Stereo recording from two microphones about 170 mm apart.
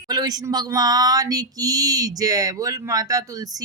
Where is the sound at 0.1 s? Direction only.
20° right (ahead or behind).